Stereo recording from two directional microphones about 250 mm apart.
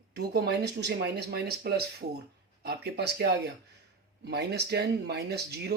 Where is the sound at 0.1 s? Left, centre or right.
Right.